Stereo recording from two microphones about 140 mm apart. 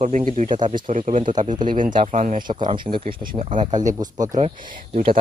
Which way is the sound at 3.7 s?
65° right (ahead or behind).